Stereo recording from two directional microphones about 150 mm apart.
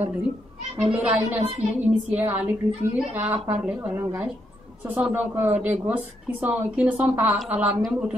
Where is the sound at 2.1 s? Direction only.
10° right (ahead or behind).